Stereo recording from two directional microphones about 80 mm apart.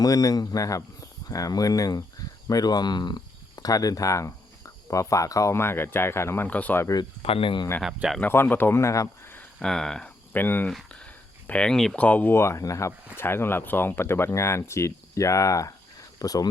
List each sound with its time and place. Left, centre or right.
0.0 s speech: left
6.5 s speech: centre
7.4 s speech: left
8.2 s speech: left
9.6 s speech: centre
10.3 s speech: left
10.9 s a sound: centre
11.9 s speech: centre
12.3 s speech: left
13.1 s speech: left